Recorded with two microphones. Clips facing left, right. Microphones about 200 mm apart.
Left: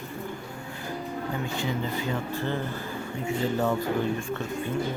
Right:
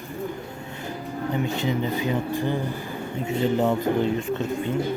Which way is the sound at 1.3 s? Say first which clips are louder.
Right 7 dB; 20° right (ahead or behind).